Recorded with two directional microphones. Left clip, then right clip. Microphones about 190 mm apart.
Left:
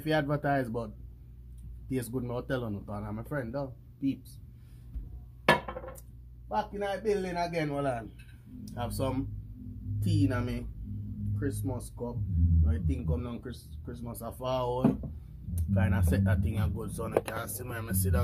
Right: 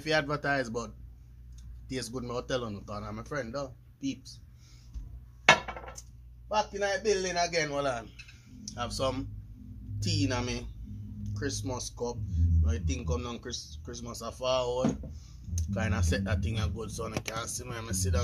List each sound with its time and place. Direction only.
0.0 s speech: 10° left (ahead or behind)
6.5 s speech: 5° right (ahead or behind)
8.6 s speech: 20° left (ahead or behind)
10.0 s speech: 15° right (ahead or behind)
14.4 s speech: 10° left (ahead or behind)
15.5 s speech: centre (ahead or behind)